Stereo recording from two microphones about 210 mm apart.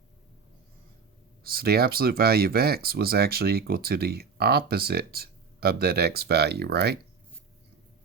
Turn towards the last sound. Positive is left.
turn(degrees=-50)  # may be behind; listen again after turning